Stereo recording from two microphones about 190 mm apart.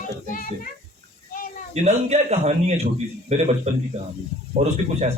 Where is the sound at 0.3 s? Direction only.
45° left (ahead or behind).